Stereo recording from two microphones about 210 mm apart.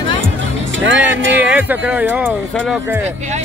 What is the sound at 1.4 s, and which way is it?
Speech, 10° right (ahead or behind).